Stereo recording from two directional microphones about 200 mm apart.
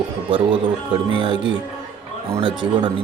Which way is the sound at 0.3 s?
25° right (ahead or behind).